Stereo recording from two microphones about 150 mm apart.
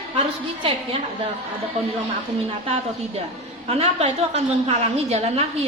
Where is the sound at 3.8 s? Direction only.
45° right (ahead or behind).